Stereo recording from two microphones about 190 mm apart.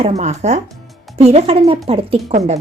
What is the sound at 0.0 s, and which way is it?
A woman's voice, 35° right (ahead or behind).